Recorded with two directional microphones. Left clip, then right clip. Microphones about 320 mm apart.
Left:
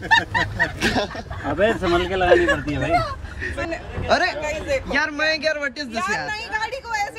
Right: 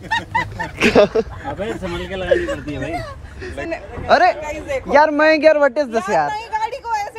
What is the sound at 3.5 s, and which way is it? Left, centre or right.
Speech, right.